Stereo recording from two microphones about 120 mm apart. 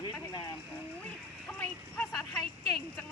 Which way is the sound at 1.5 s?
15° left (ahead or behind).